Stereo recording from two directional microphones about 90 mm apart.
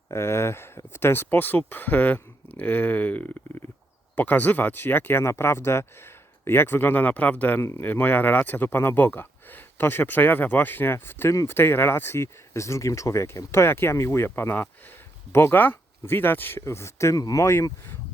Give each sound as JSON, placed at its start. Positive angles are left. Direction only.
{"t": 0.1, "sound": "speech", "side_deg": 30}